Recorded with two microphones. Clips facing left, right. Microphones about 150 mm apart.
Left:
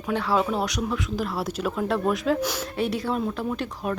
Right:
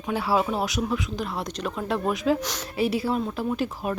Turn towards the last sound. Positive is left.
turn(degrees=-5)  # may be behind; listen again after turning